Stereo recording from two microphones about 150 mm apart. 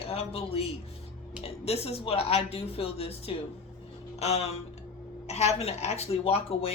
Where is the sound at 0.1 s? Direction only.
40° left (ahead or behind).